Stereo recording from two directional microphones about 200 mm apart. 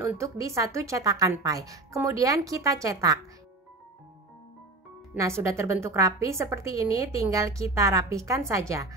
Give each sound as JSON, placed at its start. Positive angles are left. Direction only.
{"t": 0.0, "sound": "a woman's voice", "side_deg": -15}
{"t": 5.1, "sound": "a woman's voice", "side_deg": -15}